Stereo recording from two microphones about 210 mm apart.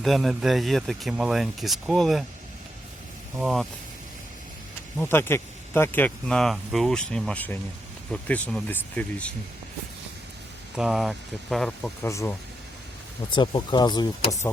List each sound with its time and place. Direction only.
0.0 s speech: centre (ahead or behind)
3.3 s speech: centre (ahead or behind)
4.9 s speech: 10° left (ahead or behind)
10.8 s speech: centre (ahead or behind)
12.0 s speech: 15° left (ahead or behind)
13.3 s speech: 20° left (ahead or behind)